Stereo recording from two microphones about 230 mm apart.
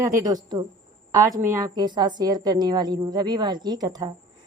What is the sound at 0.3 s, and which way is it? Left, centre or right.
A woman's voice, centre.